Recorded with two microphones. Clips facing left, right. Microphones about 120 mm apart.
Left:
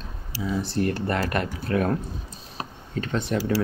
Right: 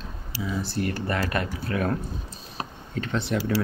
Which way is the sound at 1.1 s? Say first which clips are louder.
Left 2 dB; 50° left (ahead or behind).